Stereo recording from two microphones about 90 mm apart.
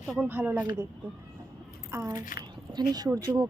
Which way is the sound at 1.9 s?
30° right (ahead or behind).